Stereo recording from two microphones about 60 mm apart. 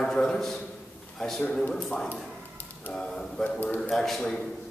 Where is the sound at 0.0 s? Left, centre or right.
Centre.